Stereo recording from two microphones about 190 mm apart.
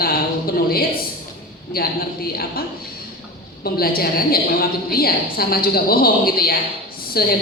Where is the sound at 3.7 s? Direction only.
50° left (ahead or behind).